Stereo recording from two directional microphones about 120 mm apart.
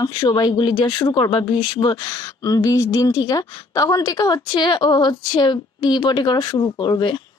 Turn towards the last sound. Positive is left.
turn(degrees=35)  # may be behind; listen again after turning